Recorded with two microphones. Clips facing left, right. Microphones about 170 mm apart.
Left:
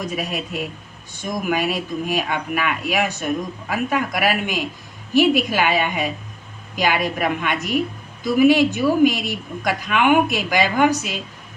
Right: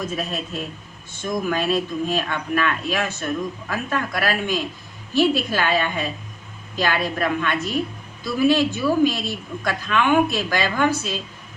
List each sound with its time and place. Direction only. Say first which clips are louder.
0.0 s speech: left 1 dB; 15° left (ahead or behind)